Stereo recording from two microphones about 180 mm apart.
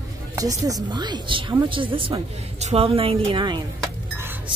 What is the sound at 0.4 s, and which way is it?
A woman's voice, 20° right (ahead or behind).